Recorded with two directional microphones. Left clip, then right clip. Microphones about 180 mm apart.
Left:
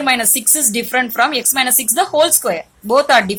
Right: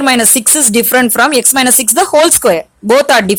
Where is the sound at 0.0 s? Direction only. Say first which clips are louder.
Right 5 dB; 60° right (ahead or behind).